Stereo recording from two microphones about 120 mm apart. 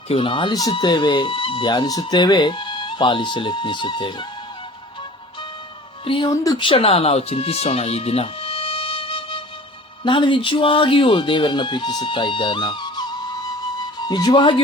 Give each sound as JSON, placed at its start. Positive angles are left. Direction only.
{"t": 0.1, "sound": "speech", "side_deg": 45}
{"t": 0.5, "sound": "speech", "side_deg": 35}
{"t": 6.1, "sound": "speech", "side_deg": 45}
{"t": 6.3, "sound": "speech", "side_deg": 30}
{"t": 6.6, "sound": "speech", "side_deg": 50}
{"t": 14.1, "sound": "speech", "side_deg": 35}